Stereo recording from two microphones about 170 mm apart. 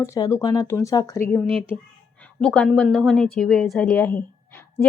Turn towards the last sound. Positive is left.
turn(degrees=15)  # may be behind; listen again after turning